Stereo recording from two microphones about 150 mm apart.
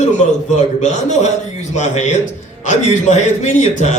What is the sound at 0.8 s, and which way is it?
A man's voice, 50° left (ahead or behind).